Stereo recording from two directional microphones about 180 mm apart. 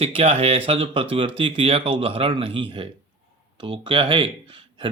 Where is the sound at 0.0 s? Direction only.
35° right (ahead or behind).